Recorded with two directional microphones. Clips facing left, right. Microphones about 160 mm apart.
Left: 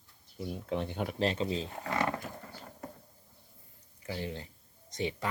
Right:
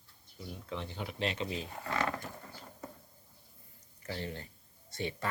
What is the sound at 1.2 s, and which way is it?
Speech, 35° left (ahead or behind).